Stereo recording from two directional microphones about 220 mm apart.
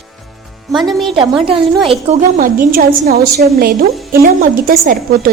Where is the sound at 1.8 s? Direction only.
30° right (ahead or behind).